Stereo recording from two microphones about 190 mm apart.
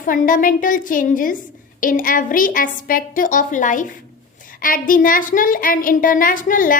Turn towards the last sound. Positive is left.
turn(degrees=45)  # may be behind; listen again after turning